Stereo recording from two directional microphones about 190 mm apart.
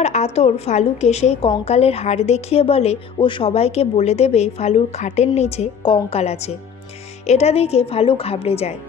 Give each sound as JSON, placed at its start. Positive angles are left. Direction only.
{"t": 0.0, "sound": "a woman's voice", "side_deg": 35}